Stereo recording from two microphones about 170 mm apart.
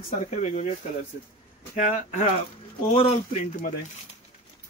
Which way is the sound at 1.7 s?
45° left (ahead or behind).